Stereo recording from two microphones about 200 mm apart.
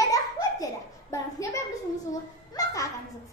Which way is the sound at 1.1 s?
15° left (ahead or behind).